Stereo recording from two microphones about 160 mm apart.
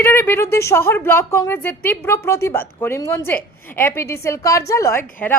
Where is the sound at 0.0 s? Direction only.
15° left (ahead or behind).